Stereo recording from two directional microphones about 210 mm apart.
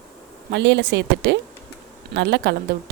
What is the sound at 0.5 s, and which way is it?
A woman's voice, 60° right (ahead or behind).